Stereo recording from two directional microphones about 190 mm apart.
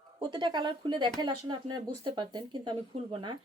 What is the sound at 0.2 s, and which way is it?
Speech, 25° right (ahead or behind).